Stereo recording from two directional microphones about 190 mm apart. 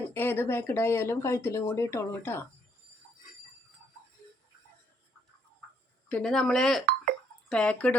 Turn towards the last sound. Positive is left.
turn(degrees=5)  # may be behind; listen again after turning